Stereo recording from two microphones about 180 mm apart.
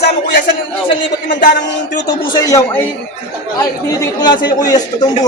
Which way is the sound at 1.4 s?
45° left (ahead or behind).